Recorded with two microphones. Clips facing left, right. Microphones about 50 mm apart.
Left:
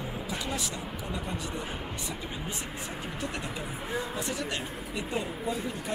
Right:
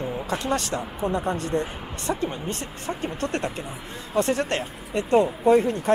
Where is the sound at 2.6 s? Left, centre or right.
Centre.